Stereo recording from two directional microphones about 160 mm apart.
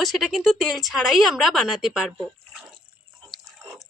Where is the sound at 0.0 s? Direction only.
Centre (ahead or behind).